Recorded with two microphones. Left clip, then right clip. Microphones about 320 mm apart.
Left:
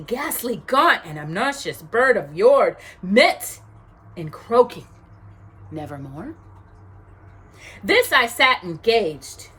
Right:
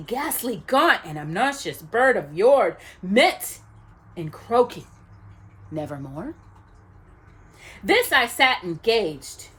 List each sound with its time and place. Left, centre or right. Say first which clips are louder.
0.1 s speech: left 2 dB; centre
7.6 s speech: left 2 dB; centre